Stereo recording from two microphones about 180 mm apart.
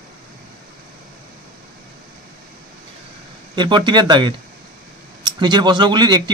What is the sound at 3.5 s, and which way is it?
Speech, 25° right (ahead or behind).